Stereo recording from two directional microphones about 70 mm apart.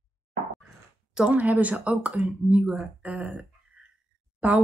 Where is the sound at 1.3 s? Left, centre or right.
Right.